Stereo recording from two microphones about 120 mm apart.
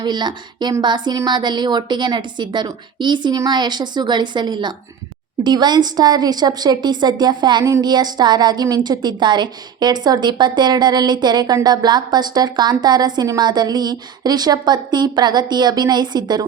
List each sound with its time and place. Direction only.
0.0 s a woman's voice: 40° right (ahead or behind)